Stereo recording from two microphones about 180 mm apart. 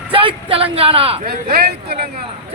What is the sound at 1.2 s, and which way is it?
Speech, 55° right (ahead or behind).